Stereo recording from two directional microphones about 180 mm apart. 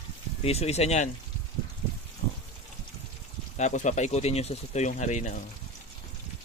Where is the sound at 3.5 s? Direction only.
40° left (ahead or behind).